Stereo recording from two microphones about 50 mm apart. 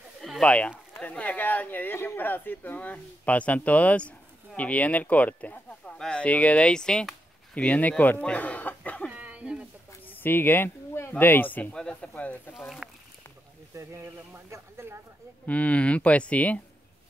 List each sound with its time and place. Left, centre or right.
0.4 s speech: left
5.9 s speech: centre
6.2 s speech: left
7.5 s speech: left
8.2 s chicken: left
9.1 s a sound: right
10.0 s speech: left
12.5 s speech: centre
14.5 s speech: right
15.4 s speech: left